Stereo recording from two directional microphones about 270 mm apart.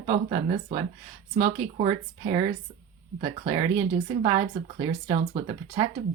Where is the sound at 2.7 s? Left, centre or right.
Right.